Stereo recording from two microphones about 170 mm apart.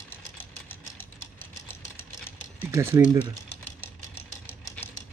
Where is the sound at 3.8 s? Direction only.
15° left (ahead or behind).